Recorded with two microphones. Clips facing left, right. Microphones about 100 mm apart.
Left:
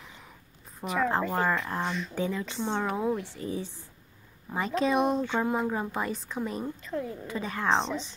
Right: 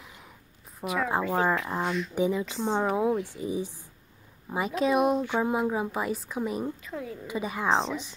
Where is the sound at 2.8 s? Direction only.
20° right (ahead or behind).